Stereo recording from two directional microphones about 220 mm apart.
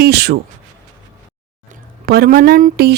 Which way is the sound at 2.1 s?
40° right (ahead or behind).